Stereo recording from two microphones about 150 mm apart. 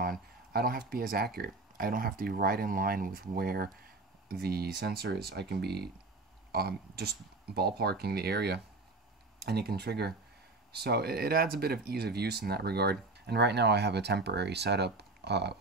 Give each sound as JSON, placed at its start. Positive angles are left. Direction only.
{"t": 0.5, "sound": "speech", "side_deg": -90}